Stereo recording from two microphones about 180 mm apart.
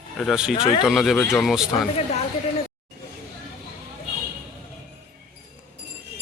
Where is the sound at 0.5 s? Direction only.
30° left (ahead or behind).